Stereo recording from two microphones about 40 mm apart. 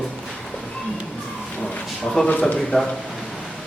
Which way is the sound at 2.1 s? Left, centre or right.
Centre.